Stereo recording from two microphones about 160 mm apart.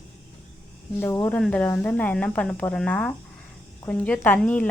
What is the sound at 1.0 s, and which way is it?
Speech, 15° left (ahead or behind).